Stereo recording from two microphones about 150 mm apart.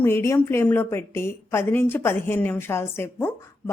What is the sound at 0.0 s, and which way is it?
A woman's voice, 15° left (ahead or behind).